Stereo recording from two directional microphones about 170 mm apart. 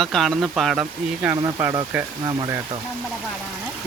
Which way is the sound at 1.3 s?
20° right (ahead or behind).